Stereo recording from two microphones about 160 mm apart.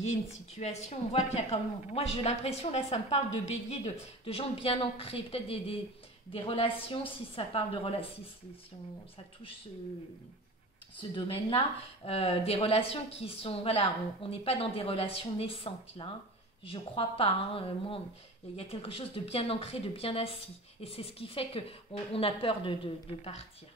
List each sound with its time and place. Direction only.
0.6 s a woman's voice: 45° left (ahead or behind)
11.0 s a woman's voice: 35° left (ahead or behind)